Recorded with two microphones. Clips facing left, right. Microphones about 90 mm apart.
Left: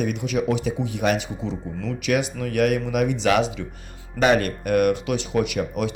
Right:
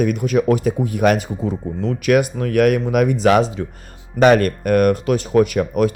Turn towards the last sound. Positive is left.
turn(degrees=-45)  # may be behind; listen again after turning